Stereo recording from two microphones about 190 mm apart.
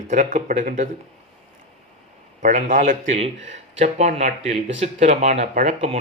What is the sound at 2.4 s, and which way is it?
A man's voice, 40° right (ahead or behind).